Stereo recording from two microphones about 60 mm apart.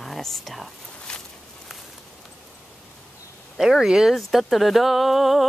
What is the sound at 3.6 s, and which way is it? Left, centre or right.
Speech, centre.